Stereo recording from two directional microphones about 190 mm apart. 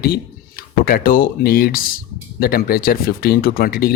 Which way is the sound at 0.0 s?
50° left (ahead or behind).